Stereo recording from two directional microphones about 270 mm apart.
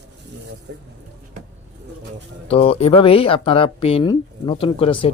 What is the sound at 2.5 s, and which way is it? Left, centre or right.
Speech, left.